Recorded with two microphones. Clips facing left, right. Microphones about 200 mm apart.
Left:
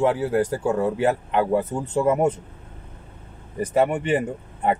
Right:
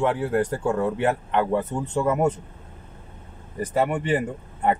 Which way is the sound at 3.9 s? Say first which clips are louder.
Left 1 dB; 25° left (ahead or behind).